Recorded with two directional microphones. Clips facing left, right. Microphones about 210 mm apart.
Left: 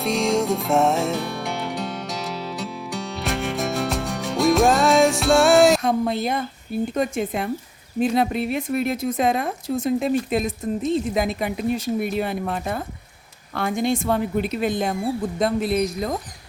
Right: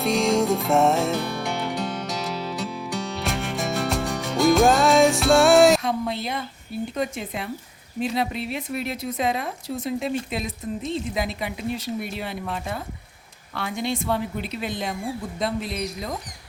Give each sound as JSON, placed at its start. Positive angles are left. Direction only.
{"t": 0.0, "sound": "music", "side_deg": 0}
{"t": 5.8, "sound": "a woman's voice", "side_deg": 45}